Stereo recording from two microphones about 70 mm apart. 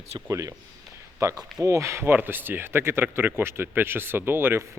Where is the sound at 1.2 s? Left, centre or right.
Right.